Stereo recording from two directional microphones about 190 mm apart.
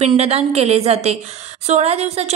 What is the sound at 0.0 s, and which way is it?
A woman's voice, 35° right (ahead or behind).